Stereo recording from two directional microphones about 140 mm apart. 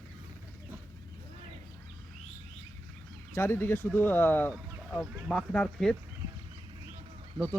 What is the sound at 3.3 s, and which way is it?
Speech, 20° left (ahead or behind).